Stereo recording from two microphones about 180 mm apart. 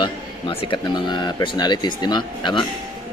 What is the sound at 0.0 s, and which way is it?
A man's voice, 30° left (ahead or behind).